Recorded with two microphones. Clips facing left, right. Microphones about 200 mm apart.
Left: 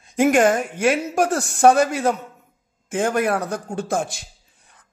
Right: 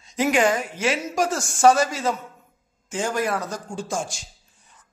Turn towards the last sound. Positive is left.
turn(degrees=60)  # may be behind; listen again after turning